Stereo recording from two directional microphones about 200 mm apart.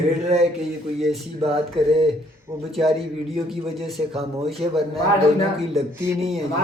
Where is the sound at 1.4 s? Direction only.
30° right (ahead or behind).